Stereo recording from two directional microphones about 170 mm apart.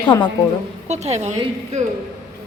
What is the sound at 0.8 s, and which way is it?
Speech, 40° right (ahead or behind).